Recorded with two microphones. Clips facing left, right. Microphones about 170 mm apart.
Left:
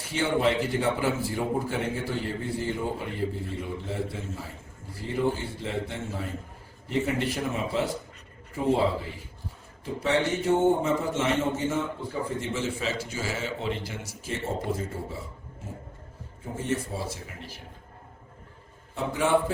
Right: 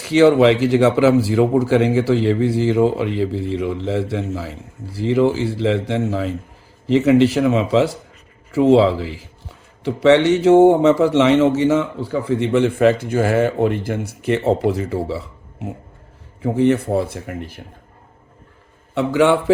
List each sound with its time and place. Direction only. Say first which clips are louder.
0.0 s a man's voice: right 13 dB; 85° right; by 17.6 s 55° right (ahead or behind)
18.9 s a man's voice: right 9 dB; 80° right